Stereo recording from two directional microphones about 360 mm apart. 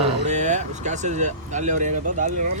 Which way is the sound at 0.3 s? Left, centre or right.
Centre.